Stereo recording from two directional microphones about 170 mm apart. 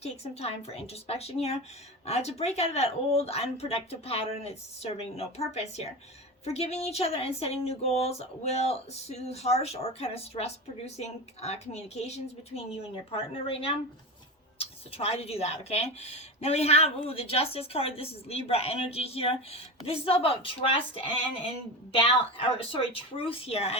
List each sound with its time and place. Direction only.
0.0 s speech: 35° left (ahead or behind)
22.4 s speech: 35° left (ahead or behind)